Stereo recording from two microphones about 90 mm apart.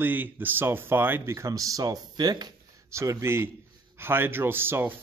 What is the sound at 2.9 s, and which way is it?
Speech, 35° right (ahead or behind).